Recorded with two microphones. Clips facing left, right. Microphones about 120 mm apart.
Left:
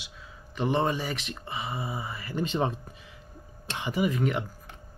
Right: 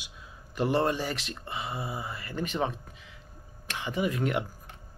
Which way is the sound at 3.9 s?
Centre (ahead or behind).